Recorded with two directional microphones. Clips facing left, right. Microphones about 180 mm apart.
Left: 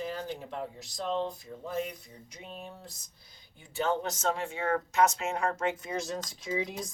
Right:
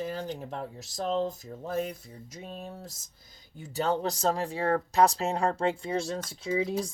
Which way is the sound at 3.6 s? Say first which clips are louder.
Right 2 dB; 40° right (ahead or behind).